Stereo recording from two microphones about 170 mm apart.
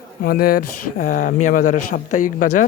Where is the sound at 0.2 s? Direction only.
60° left (ahead or behind).